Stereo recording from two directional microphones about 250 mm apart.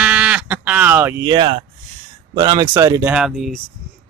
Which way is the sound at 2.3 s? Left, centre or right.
Centre.